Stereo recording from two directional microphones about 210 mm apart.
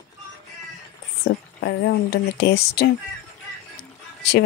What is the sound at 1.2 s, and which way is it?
Speech, 55° left (ahead or behind).